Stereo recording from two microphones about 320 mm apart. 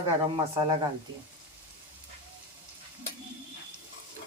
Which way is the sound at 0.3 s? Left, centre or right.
Centre.